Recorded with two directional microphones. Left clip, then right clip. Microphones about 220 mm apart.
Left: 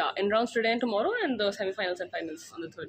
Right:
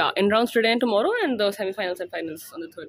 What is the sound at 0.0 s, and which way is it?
Speech, 45° right (ahead or behind).